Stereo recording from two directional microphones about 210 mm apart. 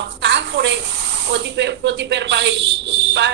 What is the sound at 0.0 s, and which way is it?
Speech, 55° right (ahead or behind).